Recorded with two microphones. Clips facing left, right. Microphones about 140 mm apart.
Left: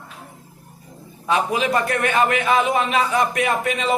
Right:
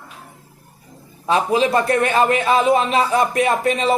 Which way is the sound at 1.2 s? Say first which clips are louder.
Right 3 dB; 30° right (ahead or behind).